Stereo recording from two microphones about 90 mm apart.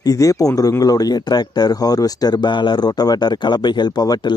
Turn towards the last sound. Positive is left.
turn(degrees=50)  # may be behind; listen again after turning